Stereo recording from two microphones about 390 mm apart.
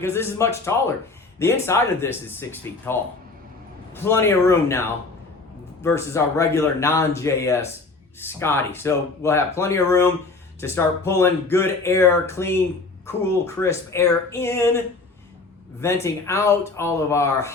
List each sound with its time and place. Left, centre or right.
0.0 s speech: centre